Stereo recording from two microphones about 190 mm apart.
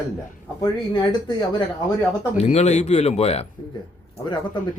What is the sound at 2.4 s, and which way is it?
A man's voice, 35° left (ahead or behind).